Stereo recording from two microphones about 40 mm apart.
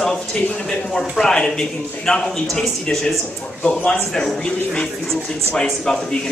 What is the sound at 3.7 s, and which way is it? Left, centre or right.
Speech, left.